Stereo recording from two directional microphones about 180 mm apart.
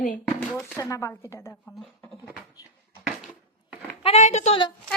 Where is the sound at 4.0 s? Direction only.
35° left (ahead or behind).